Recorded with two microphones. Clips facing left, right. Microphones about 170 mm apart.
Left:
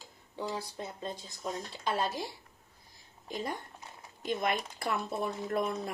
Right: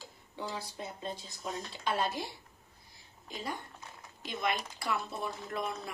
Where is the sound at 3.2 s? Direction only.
50° left (ahead or behind).